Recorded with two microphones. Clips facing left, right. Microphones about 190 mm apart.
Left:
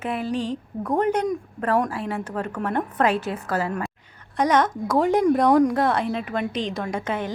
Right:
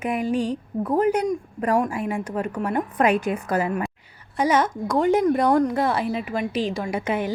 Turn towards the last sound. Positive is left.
turn(degrees=-10)  # may be behind; listen again after turning